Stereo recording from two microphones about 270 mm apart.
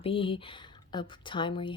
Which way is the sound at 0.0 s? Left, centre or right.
Centre.